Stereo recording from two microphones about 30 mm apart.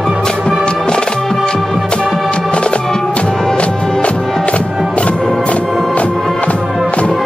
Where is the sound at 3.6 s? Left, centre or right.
Left.